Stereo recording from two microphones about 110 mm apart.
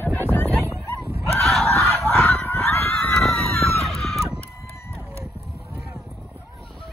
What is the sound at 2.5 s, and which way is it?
Honk, 20° left (ahead or behind).